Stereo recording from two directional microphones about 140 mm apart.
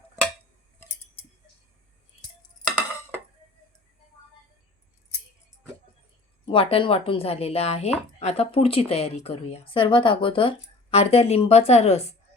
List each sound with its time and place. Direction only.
6.4 s speech: 40° left (ahead or behind)